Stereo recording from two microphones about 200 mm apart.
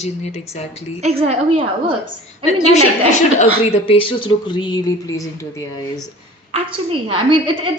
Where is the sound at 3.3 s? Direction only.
30° left (ahead or behind).